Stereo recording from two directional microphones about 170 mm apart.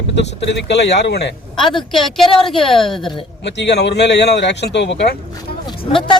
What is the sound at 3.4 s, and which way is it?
Speech, 90° left.